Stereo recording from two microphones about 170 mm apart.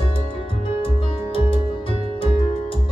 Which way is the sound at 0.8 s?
30° left (ahead or behind).